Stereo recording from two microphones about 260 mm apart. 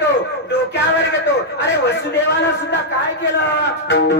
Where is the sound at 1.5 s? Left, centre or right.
Left.